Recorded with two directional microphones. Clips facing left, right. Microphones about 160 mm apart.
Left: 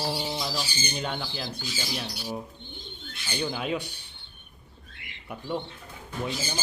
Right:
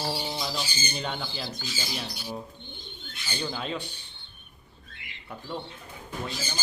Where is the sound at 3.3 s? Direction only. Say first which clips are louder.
Left 3 dB; 10° left (ahead or behind).